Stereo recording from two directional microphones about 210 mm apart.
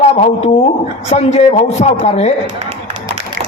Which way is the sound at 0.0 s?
30° left (ahead or behind).